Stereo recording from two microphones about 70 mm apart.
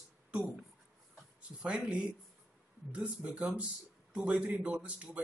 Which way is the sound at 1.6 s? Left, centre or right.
Centre.